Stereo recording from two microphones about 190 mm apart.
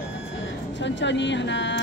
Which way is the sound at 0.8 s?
70° left (ahead or behind).